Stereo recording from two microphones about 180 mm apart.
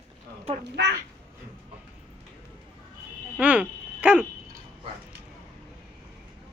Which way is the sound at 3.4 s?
10° right (ahead or behind).